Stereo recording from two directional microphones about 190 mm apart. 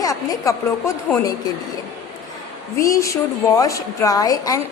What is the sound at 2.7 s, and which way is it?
A woman's voice, 15° left (ahead or behind).